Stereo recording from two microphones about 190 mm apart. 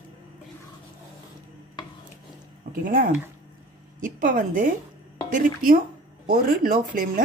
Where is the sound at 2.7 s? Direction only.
45° right (ahead or behind).